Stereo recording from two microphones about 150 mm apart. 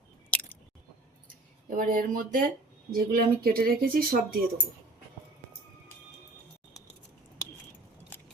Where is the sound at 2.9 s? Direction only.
85° right.